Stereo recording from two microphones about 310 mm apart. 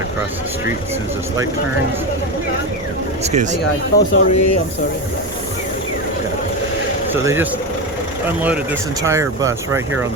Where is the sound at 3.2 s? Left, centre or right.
Right.